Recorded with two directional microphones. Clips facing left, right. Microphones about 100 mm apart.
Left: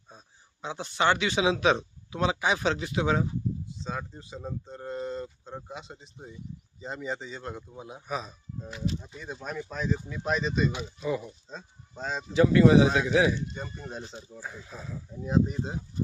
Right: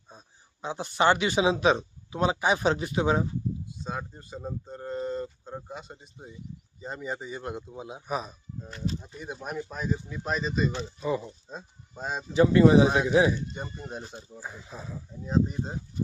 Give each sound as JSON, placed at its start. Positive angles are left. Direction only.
{"t": 0.6, "sound": "a man's voice", "side_deg": -5}
{"t": 2.3, "sound": "speech", "side_deg": -35}
{"t": 3.8, "sound": "a man's voice", "side_deg": -5}
{"t": 8.0, "sound": "a man's voice", "side_deg": -10}
{"t": 11.0, "sound": "a man's voice", "side_deg": -20}
{"t": 11.4, "sound": "speech", "side_deg": -10}
{"t": 12.3, "sound": "a man's voice", "side_deg": -30}
{"t": 15.2, "sound": "speech", "side_deg": 5}